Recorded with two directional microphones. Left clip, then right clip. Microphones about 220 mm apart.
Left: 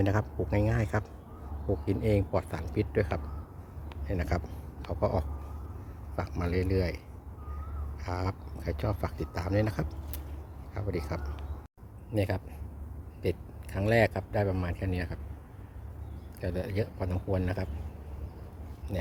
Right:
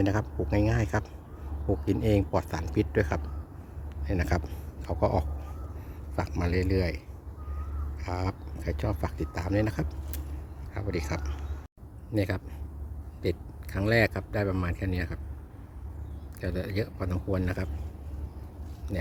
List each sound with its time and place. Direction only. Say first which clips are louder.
0.0 s speech: right 1 dB; centre (ahead or behind)
8.0 s speech: right 1 dB; 5° right (ahead or behind)
13.7 s speech: right 1 dB; 5° right (ahead or behind)
16.4 s speech: right 1 dB; 5° right (ahead or behind)
18.9 s a sound: right 1 dB; centre (ahead or behind)